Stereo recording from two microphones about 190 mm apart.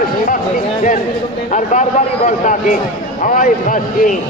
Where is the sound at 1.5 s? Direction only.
40° left (ahead or behind).